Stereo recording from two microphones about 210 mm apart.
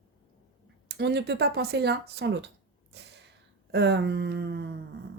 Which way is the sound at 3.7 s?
55° right (ahead or behind).